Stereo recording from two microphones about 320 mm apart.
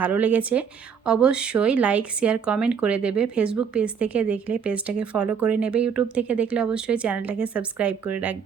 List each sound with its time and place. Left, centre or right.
0.0 s speech: centre